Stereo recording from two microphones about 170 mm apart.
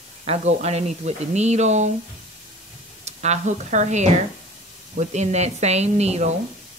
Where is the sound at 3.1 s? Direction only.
40° right (ahead or behind).